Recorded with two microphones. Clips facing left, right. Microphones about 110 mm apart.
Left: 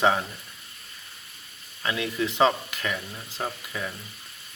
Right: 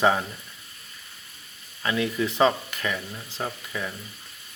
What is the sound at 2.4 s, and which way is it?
Speech, 5° left (ahead or behind).